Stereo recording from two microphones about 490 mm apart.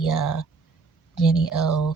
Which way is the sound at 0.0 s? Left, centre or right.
Left.